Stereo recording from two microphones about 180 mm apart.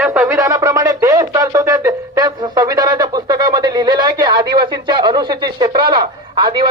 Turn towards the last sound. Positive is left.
turn(degrees=-25)  # may be behind; listen again after turning